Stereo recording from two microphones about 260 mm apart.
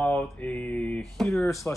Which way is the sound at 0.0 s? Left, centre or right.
Centre.